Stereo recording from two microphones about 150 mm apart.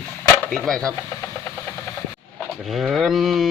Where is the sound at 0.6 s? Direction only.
5° left (ahead or behind).